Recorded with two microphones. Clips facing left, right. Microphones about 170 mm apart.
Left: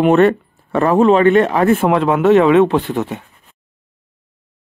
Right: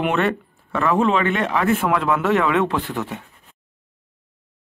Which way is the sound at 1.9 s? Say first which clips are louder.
Left 7 dB; 25° left (ahead or behind).